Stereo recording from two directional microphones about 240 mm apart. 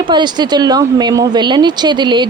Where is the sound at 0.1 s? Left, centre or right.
Centre.